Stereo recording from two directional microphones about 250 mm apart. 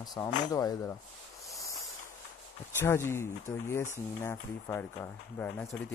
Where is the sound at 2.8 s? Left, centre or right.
Centre.